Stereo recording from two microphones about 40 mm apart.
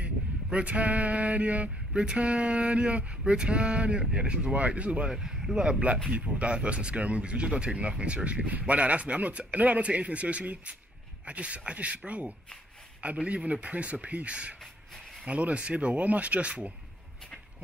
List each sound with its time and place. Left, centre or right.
0.0 s a sound: right
4.1 s speech: right
5.1 s speech: centre
6.1 s speech: right